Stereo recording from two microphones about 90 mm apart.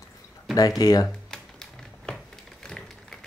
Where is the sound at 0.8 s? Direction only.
45° left (ahead or behind).